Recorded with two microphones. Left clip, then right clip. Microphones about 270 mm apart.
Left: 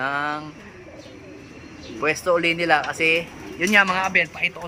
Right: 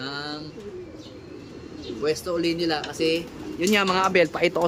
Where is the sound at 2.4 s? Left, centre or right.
Left.